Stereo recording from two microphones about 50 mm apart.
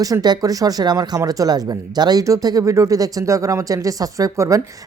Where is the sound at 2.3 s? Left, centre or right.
Right.